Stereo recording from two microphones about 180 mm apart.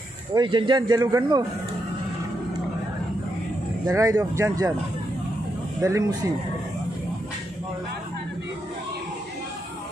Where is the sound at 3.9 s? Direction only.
20° right (ahead or behind).